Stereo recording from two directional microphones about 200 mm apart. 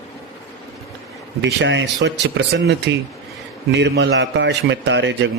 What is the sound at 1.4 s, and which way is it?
Speech, 60° right (ahead or behind).